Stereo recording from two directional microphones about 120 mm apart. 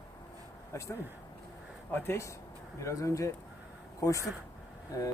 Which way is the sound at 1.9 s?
20° left (ahead or behind).